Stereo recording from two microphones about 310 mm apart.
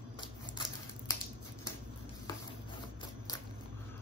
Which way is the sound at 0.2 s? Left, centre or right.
Centre.